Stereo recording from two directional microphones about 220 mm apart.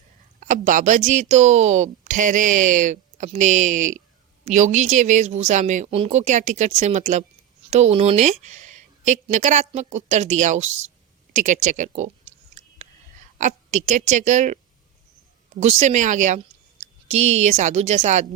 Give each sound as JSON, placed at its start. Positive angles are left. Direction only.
{"t": 0.3, "sound": "speech", "side_deg": -35}
{"t": 11.3, "sound": "a sound", "side_deg": -35}
{"t": 13.4, "sound": "speech", "side_deg": -35}
{"t": 15.6, "sound": "speech", "side_deg": -30}